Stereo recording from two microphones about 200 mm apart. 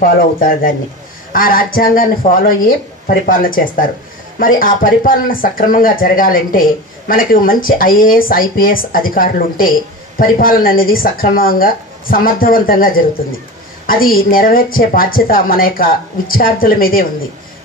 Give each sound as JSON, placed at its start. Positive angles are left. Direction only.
{"t": 0.0, "sound": "speech", "side_deg": 45}